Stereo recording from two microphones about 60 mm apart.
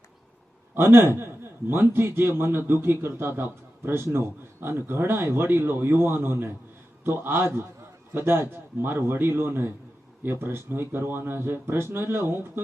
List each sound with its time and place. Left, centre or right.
0.7 s a man's voice: right